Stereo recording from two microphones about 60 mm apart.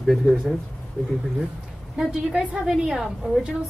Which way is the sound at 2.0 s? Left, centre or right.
Centre.